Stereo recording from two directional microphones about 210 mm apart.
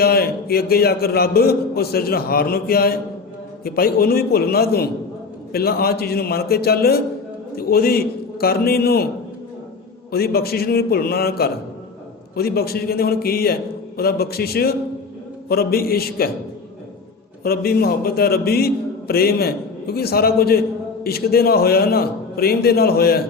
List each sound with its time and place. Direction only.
0.0 s a man's voice: 45° left (ahead or behind)
10.1 s a man's voice: 45° left (ahead or behind)
17.4 s a man's voice: 45° left (ahead or behind)